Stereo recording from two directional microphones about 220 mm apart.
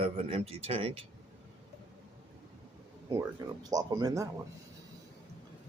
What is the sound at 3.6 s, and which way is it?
Speech, 15° right (ahead or behind).